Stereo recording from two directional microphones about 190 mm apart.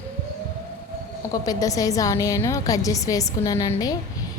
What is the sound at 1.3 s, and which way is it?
A woman's voice, 20° left (ahead or behind).